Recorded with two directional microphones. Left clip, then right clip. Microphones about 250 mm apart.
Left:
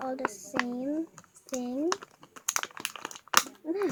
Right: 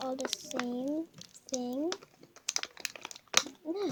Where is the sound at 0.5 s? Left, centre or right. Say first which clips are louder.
Left 3 dB; centre.